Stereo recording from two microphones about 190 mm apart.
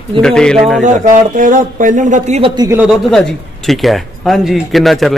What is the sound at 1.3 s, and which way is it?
A man's voice, 45° right (ahead or behind).